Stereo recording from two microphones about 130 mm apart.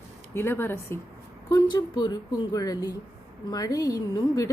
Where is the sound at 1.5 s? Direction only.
35° left (ahead or behind).